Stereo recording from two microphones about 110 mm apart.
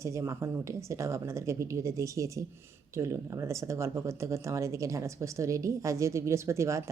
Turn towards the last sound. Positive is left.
turn(degrees=-25)  # may be behind; listen again after turning